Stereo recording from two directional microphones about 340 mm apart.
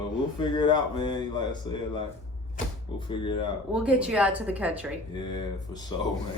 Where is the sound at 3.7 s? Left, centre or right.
Centre.